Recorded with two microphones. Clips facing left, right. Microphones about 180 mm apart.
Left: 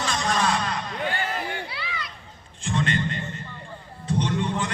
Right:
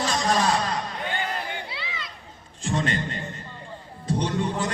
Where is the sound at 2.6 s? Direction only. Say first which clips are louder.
Left 1 dB; 40° right (ahead or behind).